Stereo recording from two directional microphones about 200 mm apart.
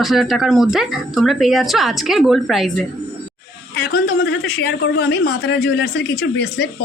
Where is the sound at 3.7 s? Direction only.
55° left (ahead or behind).